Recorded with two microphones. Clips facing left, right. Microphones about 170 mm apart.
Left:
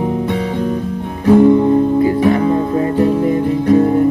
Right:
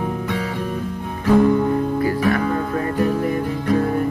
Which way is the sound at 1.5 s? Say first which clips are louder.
Left 7 dB; 25° left (ahead or behind).